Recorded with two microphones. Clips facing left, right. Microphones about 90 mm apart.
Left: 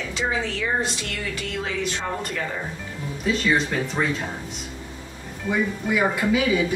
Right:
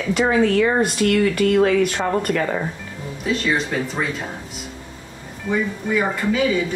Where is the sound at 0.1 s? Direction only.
55° right (ahead or behind).